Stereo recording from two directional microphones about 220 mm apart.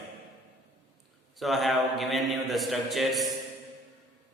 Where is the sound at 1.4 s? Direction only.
Centre (ahead or behind).